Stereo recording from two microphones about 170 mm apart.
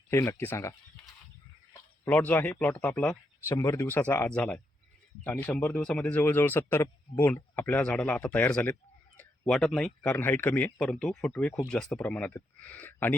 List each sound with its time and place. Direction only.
0.1 s speech: 15° left (ahead or behind)
2.0 s speech: 10° left (ahead or behind)